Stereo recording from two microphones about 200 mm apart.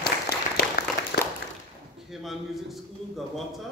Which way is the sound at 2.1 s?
Centre (ahead or behind).